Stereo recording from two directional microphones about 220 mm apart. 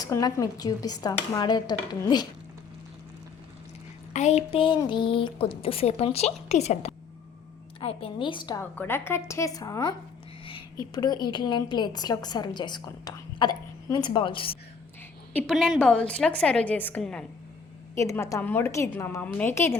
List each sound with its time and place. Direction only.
0.0 s dishes: 15° left (ahead or behind)
4.1 s a woman's voice: 30° left (ahead or behind)
8.7 s dishes: 10° left (ahead or behind)
10.4 s a woman's voice: 20° left (ahead or behind)
15.3 s a woman's voice: 5° left (ahead or behind)
17.9 s dishes: 15° left (ahead or behind)